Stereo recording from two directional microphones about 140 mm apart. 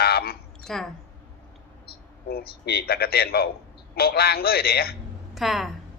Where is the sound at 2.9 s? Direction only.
90° left.